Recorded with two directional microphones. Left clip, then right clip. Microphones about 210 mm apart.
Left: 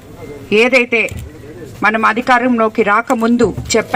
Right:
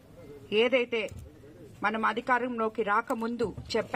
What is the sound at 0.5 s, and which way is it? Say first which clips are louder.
A man's voice: left 15 dB; 50° left (ahead or behind).